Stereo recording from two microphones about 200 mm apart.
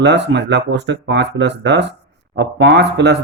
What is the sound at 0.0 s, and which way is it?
Speech, 60° right (ahead or behind).